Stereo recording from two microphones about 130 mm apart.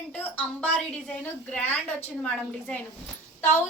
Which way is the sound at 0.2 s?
10° left (ahead or behind).